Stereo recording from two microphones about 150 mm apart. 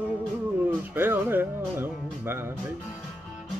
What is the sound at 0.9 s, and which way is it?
Music, 15° right (ahead or behind).